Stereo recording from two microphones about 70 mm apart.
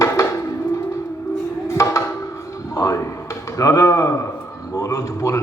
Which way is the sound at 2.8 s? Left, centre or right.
Left.